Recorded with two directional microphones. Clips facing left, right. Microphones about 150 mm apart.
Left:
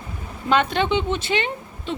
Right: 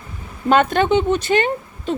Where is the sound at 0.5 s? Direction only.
50° right (ahead or behind).